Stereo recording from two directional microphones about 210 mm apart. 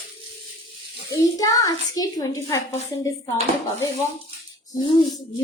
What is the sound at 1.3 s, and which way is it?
A child's voice, 15° left (ahead or behind).